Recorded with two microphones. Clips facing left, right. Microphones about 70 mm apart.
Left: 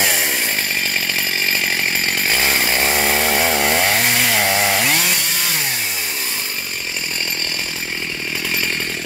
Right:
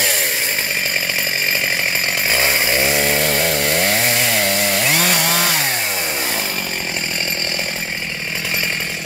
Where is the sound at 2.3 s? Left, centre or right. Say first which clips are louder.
Right 2 dB; centre.